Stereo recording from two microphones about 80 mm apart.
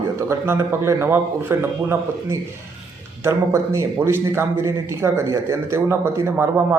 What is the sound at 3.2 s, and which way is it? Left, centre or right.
A man's voice, right.